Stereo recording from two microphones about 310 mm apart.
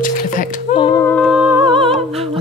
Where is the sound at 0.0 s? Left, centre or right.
Left.